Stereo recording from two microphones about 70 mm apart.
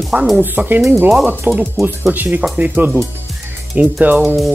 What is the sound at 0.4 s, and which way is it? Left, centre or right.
Speech, right.